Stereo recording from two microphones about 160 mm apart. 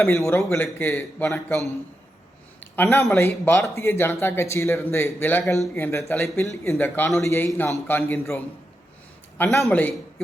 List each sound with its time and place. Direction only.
0.0 s a man's voice: 15° left (ahead or behind)
2.6 s a sound: 10° left (ahead or behind)
3.2 s a man's voice: 15° left (ahead or behind)
9.4 s a man's voice: centre (ahead or behind)